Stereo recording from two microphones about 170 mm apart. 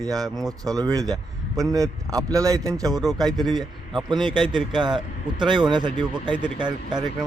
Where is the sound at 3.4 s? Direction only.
Centre (ahead or behind).